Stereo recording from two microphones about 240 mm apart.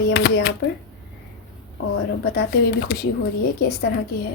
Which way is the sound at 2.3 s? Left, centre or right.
Left.